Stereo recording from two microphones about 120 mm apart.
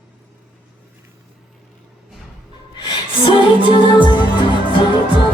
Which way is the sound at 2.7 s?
40° left (ahead or behind).